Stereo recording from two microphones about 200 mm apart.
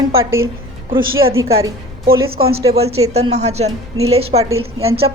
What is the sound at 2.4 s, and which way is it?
Speech, 50° right (ahead or behind).